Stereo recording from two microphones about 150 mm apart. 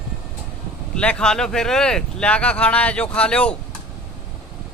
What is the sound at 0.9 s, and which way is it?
Speech, 5° left (ahead or behind).